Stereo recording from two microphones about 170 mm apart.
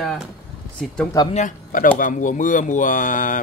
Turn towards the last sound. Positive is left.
turn(degrees=50)  # may be behind; listen again after turning